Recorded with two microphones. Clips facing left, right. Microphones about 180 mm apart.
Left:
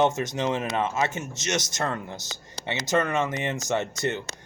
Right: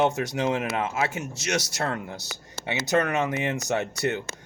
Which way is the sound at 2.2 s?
20° left (ahead or behind).